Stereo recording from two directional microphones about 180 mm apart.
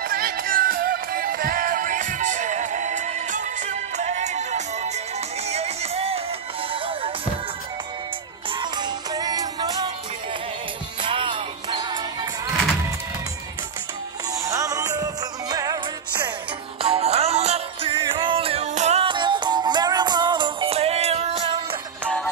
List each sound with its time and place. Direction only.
0.1 s music: 55° right (ahead or behind); by 6.2 s 35° right (ahead or behind)
8.5 s music: 25° right (ahead or behind)
11.0 s music: 30° right (ahead or behind)
14.4 s music: 15° right (ahead or behind)
16.8 s music: 35° right (ahead or behind)